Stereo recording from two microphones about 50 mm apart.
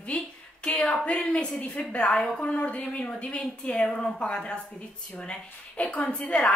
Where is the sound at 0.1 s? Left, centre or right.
Left.